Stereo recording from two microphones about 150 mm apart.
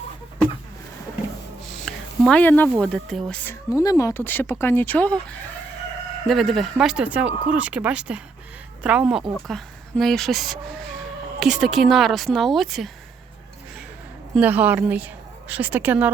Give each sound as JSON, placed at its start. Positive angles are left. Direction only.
{"t": 1.8, "sound": "a sound", "side_deg": 0}
{"t": 2.4, "sound": "speech", "side_deg": 10}
{"t": 3.8, "sound": "a woman's voice", "side_deg": 20}
{"t": 14.3, "sound": "a woman's voice", "side_deg": -10}